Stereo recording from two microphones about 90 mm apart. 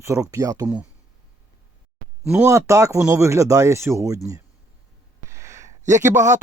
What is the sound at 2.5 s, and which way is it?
Speech, 35° right (ahead or behind).